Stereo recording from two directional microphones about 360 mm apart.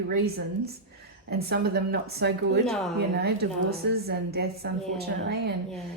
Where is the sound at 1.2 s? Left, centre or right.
Right.